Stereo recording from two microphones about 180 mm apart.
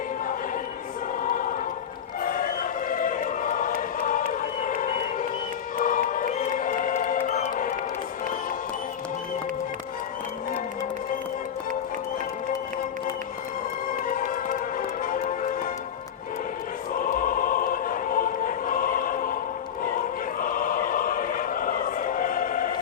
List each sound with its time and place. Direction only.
1.2 s choir: 50° left (ahead or behind)
5.8 s music: 50° left (ahead or behind)
14.2 s music: 50° left (ahead or behind)
17.0 s choir: 50° left (ahead or behind)